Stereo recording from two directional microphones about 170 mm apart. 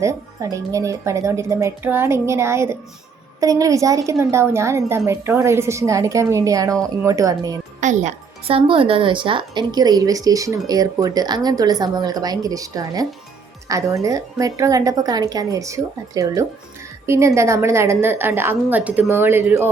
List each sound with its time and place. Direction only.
0.0 s a woman's voice: 20° right (ahead or behind)
7.8 s a woman's voice: 45° right (ahead or behind); by 19.7 s 15° right (ahead or behind)